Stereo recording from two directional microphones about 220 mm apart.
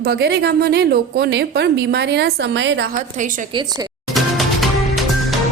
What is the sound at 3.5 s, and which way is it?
Speech, 20° right (ahead or behind).